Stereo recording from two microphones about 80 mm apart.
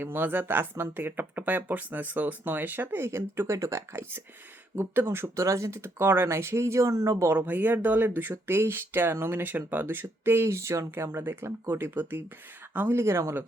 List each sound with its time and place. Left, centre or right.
0.0 s speech: right
7.3 s speech: right